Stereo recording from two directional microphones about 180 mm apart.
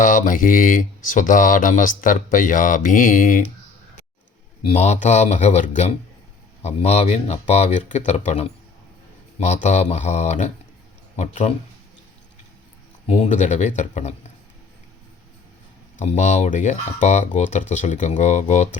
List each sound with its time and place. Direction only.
0.0 s mantra: 45° left (ahead or behind)
4.6 s speech: 35° left (ahead or behind)
13.1 s speech: 40° left (ahead or behind)
16.0 s speech: 40° left (ahead or behind)